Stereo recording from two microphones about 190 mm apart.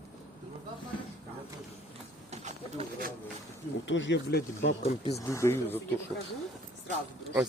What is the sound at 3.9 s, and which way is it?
Speech, 75° left (ahead or behind).